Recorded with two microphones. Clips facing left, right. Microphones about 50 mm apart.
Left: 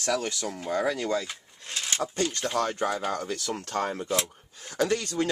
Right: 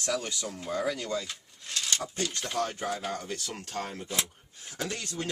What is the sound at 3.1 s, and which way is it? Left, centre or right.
Speech, left.